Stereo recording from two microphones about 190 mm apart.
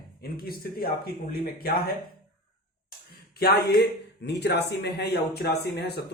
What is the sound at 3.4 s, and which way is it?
Speech, 55° left (ahead or behind).